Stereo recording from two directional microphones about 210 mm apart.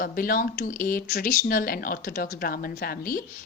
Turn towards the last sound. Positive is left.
turn(degrees=45)  # may be behind; listen again after turning